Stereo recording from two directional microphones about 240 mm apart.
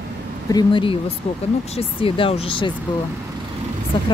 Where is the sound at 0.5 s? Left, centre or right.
Left.